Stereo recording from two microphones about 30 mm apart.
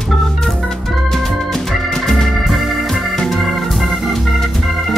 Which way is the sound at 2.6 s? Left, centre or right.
Centre.